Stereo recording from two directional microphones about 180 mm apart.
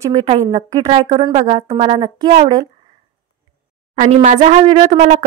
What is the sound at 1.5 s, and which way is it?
Speech, 20° right (ahead or behind).